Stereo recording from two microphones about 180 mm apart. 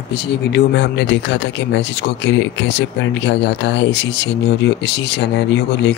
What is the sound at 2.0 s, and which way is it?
Speech, 85° left.